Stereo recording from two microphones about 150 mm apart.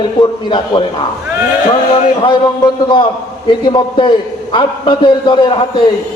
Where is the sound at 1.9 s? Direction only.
35° left (ahead or behind).